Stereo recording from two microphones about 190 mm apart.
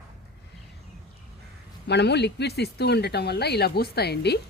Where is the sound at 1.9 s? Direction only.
60° left (ahead or behind).